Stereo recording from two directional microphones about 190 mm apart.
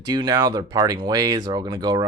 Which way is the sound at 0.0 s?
20° right (ahead or behind).